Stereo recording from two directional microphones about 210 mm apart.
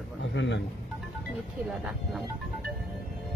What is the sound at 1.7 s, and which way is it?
Speech, centre (ahead or behind).